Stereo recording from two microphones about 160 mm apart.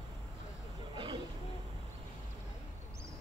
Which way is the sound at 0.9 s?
30° right (ahead or behind).